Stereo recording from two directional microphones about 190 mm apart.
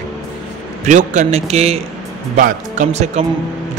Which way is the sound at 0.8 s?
40° right (ahead or behind).